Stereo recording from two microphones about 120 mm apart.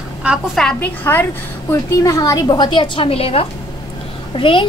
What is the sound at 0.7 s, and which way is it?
Speech, 15° left (ahead or behind).